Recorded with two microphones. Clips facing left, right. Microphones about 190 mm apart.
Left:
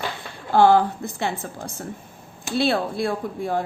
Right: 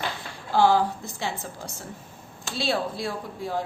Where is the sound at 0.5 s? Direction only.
55° left (ahead or behind).